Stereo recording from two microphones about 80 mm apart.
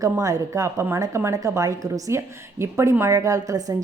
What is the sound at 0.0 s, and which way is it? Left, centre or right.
A woman's voice, right.